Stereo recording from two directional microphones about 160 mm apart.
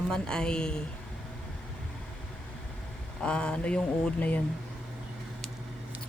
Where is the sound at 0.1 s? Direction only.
5° left (ahead or behind).